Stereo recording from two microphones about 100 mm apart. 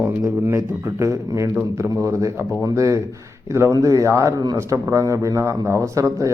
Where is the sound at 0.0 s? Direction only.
25° right (ahead or behind).